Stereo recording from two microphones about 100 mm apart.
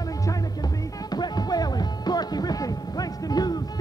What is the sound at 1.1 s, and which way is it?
Music, 45° left (ahead or behind).